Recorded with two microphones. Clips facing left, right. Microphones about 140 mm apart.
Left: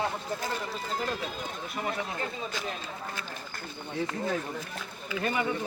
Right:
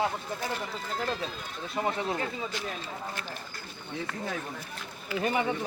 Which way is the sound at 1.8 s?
25° right (ahead or behind).